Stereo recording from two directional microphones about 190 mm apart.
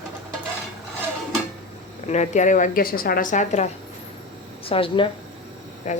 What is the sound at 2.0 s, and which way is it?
A woman's voice, 35° left (ahead or behind).